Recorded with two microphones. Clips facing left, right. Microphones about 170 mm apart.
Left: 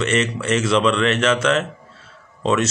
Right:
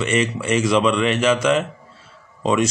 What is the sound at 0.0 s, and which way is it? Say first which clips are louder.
Speech: even; 10° right (ahead or behind).